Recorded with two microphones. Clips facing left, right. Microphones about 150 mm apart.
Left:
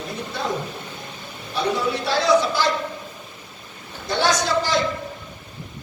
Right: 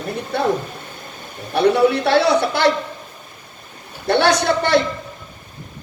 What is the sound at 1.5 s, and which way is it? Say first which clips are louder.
A man's voice: right 9 dB; 60° right (ahead or behind).